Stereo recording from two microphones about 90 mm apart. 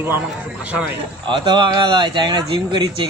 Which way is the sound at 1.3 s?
65° right (ahead or behind).